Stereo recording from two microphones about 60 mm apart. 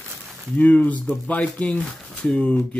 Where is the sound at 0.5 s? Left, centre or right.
Left.